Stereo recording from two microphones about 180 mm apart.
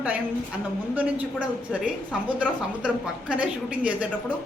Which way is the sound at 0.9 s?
5° right (ahead or behind).